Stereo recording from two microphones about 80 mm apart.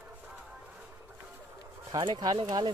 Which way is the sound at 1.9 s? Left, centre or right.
Right.